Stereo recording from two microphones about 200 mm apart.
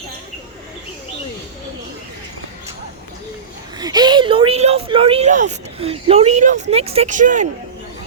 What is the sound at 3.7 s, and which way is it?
Speech, 20° right (ahead or behind).